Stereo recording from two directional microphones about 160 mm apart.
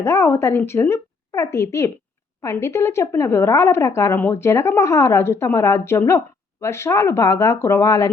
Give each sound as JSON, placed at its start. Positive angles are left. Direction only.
{"t": 0.0, "sound": "a woman's voice", "side_deg": 15}